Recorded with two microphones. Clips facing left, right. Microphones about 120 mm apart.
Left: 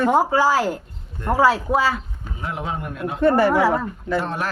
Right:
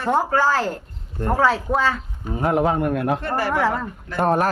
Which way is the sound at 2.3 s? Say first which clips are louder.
Right 9 dB; 50° right (ahead or behind).